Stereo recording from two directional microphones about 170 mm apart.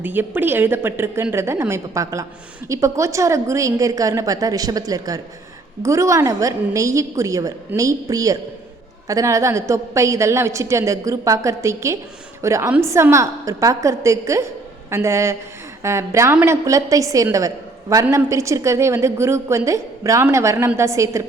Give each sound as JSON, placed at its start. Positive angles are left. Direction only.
{"t": 0.0, "sound": "a woman's voice", "side_deg": -10}